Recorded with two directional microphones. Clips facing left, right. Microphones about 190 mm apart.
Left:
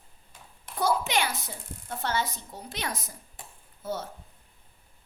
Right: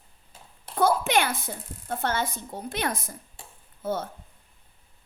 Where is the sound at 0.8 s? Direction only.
55° right (ahead or behind).